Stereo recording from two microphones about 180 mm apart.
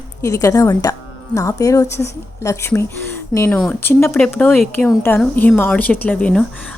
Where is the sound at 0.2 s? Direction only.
20° left (ahead or behind).